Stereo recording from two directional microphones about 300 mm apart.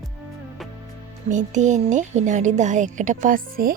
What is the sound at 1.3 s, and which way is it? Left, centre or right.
Speech, right.